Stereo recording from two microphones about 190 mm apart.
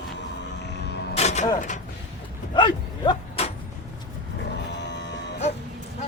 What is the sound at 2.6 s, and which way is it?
Cattle, 25° left (ahead or behind).